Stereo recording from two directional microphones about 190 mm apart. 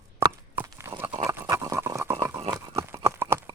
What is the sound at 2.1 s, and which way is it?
Chewing, 25° right (ahead or behind).